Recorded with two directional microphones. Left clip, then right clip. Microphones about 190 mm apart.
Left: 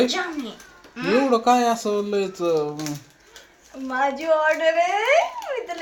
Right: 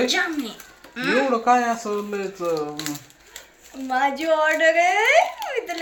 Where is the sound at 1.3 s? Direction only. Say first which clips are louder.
Left 2 dB; 40° left (ahead or behind).